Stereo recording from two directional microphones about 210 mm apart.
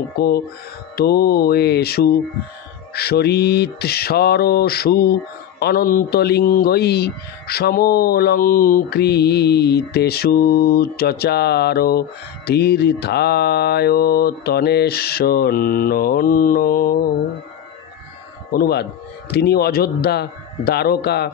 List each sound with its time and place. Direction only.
0.9 s speech: 50° left (ahead or behind)
18.5 s speech: 45° left (ahead or behind)